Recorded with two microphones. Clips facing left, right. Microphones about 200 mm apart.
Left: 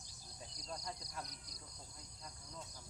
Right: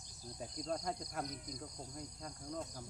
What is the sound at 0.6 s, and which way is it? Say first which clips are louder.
Speech: right 8 dB; 50° right (ahead or behind).